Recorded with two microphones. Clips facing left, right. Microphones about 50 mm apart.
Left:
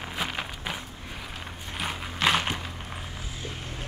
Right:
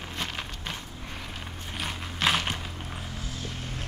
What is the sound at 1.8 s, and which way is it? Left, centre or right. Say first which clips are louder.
Clip-clop: left 2 dB; centre.